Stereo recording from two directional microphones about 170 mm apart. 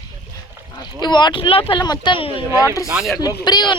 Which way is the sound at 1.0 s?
25° left (ahead or behind).